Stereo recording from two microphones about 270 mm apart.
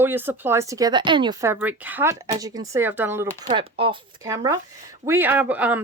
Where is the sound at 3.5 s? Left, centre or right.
Centre.